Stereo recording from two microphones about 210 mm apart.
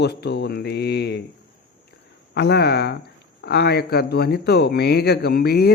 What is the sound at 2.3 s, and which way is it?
Speech, 55° left (ahead or behind).